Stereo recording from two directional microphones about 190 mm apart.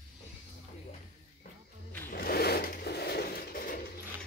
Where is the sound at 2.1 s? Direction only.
55° left (ahead or behind).